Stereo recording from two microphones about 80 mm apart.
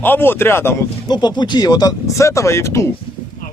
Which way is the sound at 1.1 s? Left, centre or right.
Left.